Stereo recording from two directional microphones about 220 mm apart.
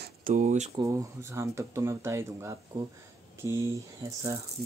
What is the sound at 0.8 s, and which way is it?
Speech, 15° right (ahead or behind).